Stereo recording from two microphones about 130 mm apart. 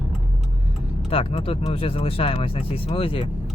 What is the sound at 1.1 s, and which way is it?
Speech, 50° left (ahead or behind).